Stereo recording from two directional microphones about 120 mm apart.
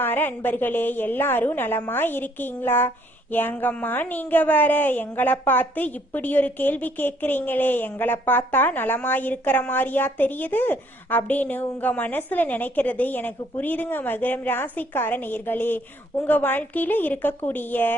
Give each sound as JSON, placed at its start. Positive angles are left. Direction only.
{"t": 0.0, "sound": "a woman's voice", "side_deg": 15}